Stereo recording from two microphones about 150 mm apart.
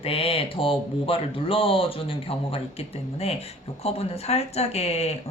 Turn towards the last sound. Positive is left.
turn(degrees=45)  # may be behind; listen again after turning